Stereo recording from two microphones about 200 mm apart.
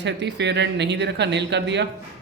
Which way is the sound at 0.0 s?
60° right (ahead or behind).